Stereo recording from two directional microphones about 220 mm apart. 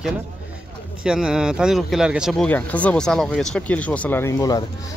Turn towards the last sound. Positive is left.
turn(degrees=15)  # may be behind; listen again after turning